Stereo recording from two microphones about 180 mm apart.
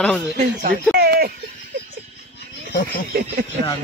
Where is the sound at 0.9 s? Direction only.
60° right (ahead or behind).